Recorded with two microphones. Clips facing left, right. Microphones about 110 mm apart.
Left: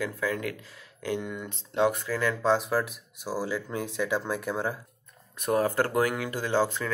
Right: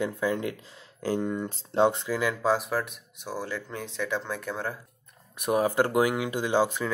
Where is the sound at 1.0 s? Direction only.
35° right (ahead or behind); by 2.3 s 15° right (ahead or behind).